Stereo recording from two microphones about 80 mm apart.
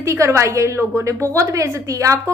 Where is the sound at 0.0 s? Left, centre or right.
Right.